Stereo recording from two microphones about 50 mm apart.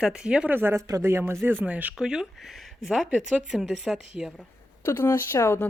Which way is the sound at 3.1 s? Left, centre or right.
Right.